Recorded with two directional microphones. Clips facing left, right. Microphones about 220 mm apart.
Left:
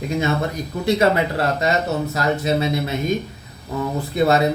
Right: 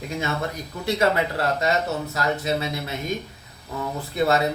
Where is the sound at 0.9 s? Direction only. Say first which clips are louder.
Left 4 dB; 20° left (ahead or behind).